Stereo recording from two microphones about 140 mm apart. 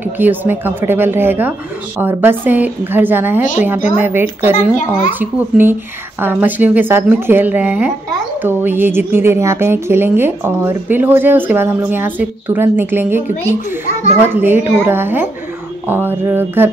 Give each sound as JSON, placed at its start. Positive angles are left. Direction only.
{"t": 0.0, "sound": "a woman's voice", "side_deg": -15}
{"t": 14.3, "sound": "a woman's voice", "side_deg": -15}